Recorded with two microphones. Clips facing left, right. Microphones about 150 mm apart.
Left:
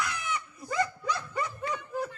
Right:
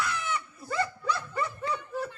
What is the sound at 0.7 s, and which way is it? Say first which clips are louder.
Dog: even; 15° left (ahead or behind).